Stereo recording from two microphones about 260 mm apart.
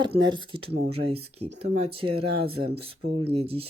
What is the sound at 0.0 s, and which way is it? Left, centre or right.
Speech, centre.